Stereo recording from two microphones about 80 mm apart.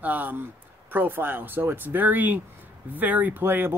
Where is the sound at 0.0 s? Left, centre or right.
Right.